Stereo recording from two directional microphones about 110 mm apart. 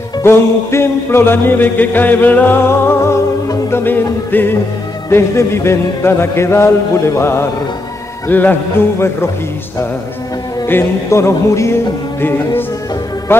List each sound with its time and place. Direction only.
0.2 s music: 25° left (ahead or behind)
10.7 s music: 25° left (ahead or behind)